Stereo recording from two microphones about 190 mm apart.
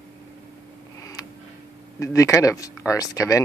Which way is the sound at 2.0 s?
15° left (ahead or behind).